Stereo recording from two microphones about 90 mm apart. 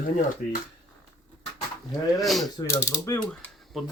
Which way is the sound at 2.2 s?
Centre (ahead or behind).